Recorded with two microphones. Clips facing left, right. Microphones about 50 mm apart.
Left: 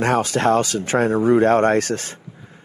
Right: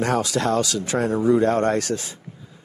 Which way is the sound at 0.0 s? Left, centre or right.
Left.